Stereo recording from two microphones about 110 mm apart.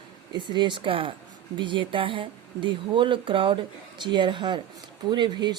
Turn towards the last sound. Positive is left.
turn(degrees=-40)  # may be behind; listen again after turning